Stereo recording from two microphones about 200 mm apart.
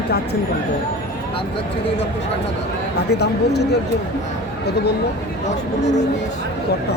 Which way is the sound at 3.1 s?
55° left (ahead or behind).